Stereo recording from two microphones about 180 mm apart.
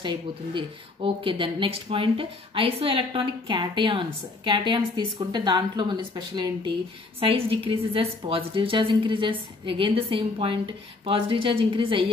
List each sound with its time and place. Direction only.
0.6 s speech: 30° right (ahead or behind)